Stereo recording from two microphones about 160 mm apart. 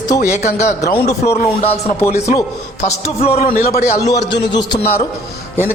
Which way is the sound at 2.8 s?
40° left (ahead or behind).